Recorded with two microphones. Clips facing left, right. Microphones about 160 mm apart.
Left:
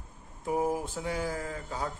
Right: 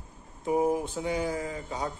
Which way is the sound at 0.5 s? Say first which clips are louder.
Right 4 dB; centre (ahead or behind).